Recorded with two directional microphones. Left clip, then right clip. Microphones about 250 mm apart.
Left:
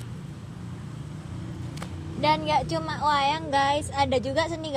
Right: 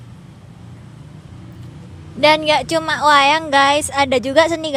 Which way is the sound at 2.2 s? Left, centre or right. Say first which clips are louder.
Right 10 dB; right.